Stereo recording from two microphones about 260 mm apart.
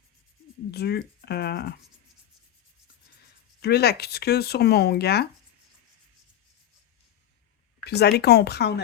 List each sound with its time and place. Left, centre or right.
0.7 s speech: left
3.6 s speech: left
7.9 s speech: left